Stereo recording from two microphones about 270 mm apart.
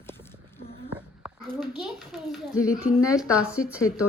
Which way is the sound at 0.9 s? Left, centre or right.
Centre.